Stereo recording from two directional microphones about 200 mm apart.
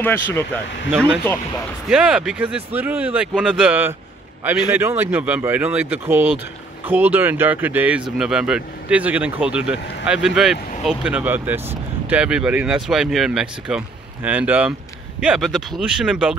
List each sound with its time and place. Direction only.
0.0 s speech: 10° left (ahead or behind)
1.9 s speech: 5° right (ahead or behind)